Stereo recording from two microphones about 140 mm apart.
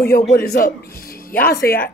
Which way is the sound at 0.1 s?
90° left.